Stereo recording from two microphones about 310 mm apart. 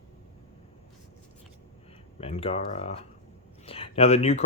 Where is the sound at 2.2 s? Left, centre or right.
Centre.